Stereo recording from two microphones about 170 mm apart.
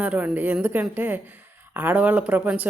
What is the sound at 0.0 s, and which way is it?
A woman's voice, 10° right (ahead or behind).